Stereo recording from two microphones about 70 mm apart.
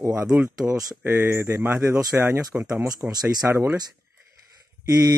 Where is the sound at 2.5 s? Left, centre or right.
Right.